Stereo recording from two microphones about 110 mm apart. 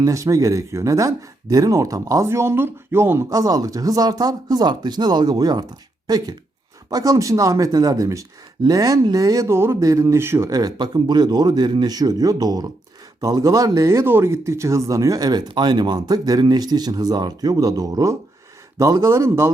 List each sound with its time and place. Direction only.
0.0 s speech: 30° right (ahead or behind)